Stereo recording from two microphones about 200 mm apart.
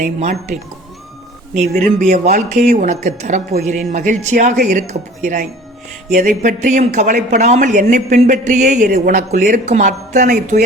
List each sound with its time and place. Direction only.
0.0 s speech: 35° right (ahead or behind)